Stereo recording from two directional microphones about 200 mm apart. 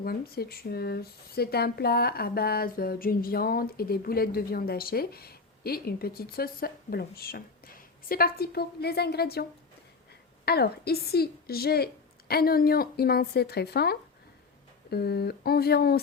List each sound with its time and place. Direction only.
0.0 s speech: 50° left (ahead or behind)